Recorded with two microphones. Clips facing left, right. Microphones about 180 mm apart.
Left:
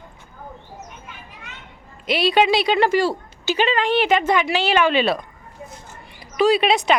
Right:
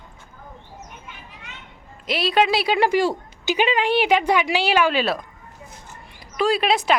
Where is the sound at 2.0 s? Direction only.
Centre (ahead or behind).